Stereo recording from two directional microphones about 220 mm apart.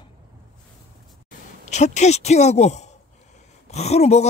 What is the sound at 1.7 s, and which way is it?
Speech, 30° left (ahead or behind).